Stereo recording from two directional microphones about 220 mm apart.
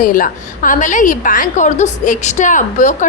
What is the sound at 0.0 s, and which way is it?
A woman's voice, 40° left (ahead or behind).